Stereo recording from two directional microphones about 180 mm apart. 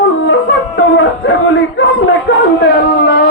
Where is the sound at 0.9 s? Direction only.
90° left.